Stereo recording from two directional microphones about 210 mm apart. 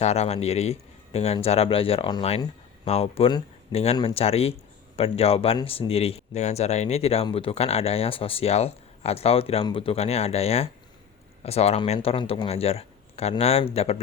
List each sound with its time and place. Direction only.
0.0 s speech: 30° left (ahead or behind)